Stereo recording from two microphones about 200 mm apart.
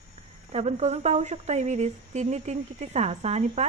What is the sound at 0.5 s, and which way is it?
Speech, 35° right (ahead or behind).